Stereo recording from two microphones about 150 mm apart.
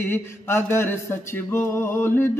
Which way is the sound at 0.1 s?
15° left (ahead or behind).